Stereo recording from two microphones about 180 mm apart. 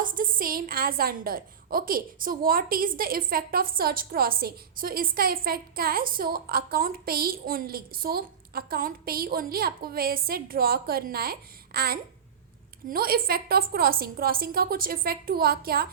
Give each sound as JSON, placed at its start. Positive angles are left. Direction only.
{"t": 0.0, "sound": "a woman's voice", "side_deg": -50}